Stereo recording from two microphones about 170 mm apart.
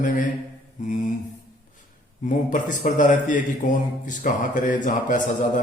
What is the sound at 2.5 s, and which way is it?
A man's voice, 50° left (ahead or behind).